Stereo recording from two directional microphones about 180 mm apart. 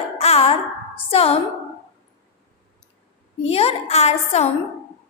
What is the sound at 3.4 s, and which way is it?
A woman's voice, 35° left (ahead or behind).